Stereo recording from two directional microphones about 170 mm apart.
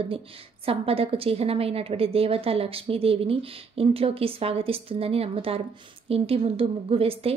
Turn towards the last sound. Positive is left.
turn(degrees=-35)  # may be behind; listen again after turning